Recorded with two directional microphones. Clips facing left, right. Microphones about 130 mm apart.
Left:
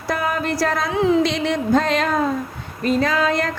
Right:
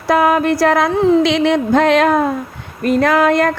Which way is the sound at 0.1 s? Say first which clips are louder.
Right 9 dB; 65° right (ahead or behind).